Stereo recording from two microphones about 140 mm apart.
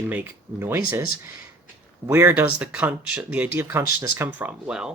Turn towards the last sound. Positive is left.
turn(degrees=-5)  # may be behind; listen again after turning